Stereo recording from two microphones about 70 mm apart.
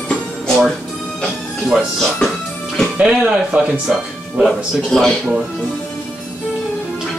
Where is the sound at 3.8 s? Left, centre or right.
Centre.